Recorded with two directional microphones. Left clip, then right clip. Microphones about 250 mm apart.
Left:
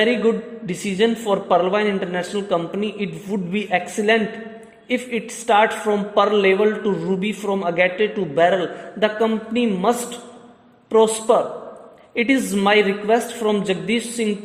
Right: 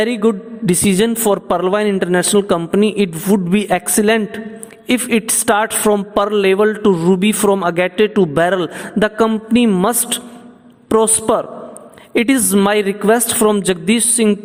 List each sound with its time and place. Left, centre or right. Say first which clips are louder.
0.0 s a man's voice: right 2 dB; right